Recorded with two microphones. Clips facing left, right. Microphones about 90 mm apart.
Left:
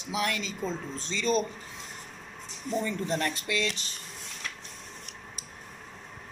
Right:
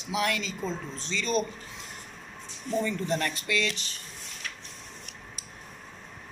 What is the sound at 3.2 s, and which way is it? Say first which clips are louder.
Speech: right 1 dB; 25° left (ahead or behind).